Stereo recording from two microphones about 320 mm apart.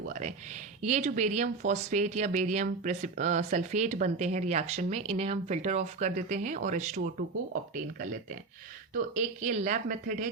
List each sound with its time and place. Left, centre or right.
0.0 s speech: right